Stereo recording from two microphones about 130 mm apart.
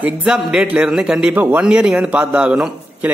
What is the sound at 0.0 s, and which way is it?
A man's voice, 5° right (ahead or behind).